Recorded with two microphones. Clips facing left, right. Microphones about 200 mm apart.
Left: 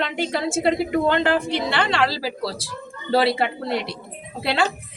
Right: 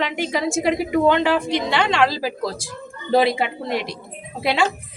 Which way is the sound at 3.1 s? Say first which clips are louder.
Right 1 dB; 15° right (ahead or behind).